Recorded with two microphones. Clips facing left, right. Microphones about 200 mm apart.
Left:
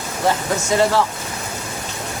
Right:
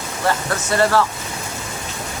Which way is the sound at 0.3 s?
15° left (ahead or behind).